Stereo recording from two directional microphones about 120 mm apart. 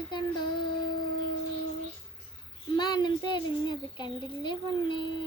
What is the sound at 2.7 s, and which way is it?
Speech, 40° left (ahead or behind).